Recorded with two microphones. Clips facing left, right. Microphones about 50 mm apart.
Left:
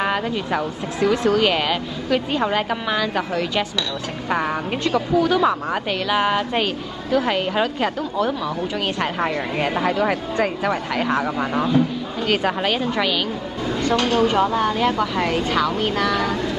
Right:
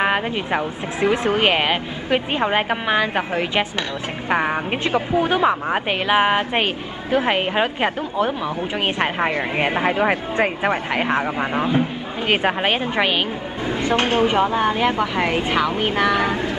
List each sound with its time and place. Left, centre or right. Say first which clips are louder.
0.0 s a woman's voice: right 2 dB; right